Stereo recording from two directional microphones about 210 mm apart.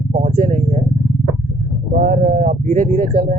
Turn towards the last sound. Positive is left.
turn(degrees=-45)  # may be behind; listen again after turning